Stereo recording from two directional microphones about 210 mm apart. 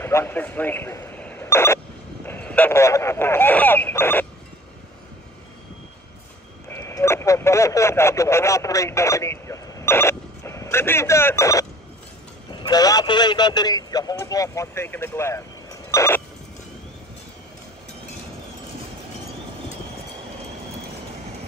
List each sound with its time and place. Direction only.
0.0 s a man's voice: 10° left (ahead or behind)
6.7 s a man's voice: 10° left (ahead or behind)